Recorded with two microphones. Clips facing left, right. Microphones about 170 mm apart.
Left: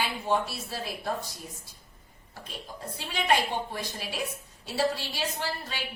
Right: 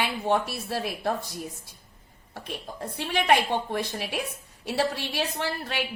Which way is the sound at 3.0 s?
65° right (ahead or behind).